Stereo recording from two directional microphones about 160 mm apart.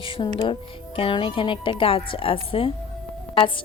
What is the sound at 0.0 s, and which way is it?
A woman's voice, 30° left (ahead or behind).